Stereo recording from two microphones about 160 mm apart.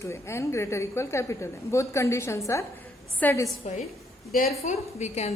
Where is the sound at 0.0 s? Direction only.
15° left (ahead or behind).